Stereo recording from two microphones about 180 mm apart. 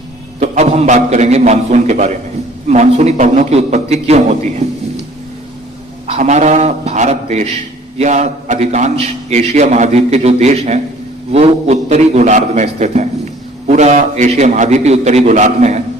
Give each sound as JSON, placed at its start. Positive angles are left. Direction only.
{"t": 0.3, "sound": "a man's voice", "side_deg": -40}
{"t": 6.1, "sound": "a man's voice", "side_deg": -40}